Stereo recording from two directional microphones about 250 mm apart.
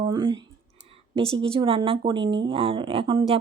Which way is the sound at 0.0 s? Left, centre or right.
Centre.